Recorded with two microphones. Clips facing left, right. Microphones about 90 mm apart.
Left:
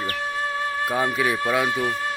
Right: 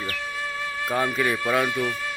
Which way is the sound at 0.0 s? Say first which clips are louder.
Left 4 dB; 40° left (ahead or behind).